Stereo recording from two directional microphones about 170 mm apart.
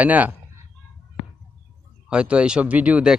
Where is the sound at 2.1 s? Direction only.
5° right (ahead or behind).